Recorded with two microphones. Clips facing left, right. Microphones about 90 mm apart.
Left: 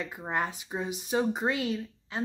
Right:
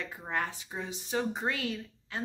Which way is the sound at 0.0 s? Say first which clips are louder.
Left 3 dB; 20° left (ahead or behind).